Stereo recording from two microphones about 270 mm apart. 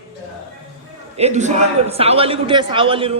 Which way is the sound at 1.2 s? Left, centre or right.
Right.